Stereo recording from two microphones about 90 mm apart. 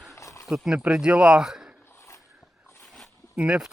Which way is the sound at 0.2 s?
35° left (ahead or behind).